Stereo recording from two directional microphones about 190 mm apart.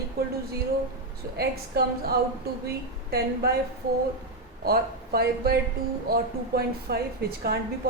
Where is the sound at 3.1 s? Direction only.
55° right (ahead or behind).